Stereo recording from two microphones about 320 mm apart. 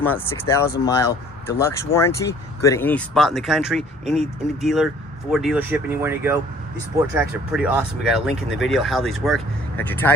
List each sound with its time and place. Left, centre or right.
0.0 s speech: centre
8.3 s speech: left
8.6 s speech: centre